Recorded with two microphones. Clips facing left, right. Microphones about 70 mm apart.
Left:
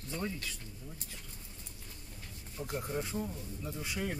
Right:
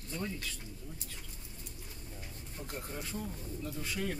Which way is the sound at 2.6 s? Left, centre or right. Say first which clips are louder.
Left 6 dB; centre.